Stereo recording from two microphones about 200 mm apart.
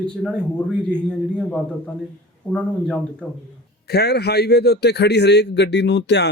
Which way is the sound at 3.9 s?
55° left (ahead or behind).